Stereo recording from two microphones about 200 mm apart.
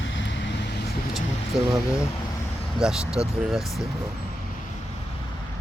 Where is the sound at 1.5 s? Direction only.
Centre (ahead or behind).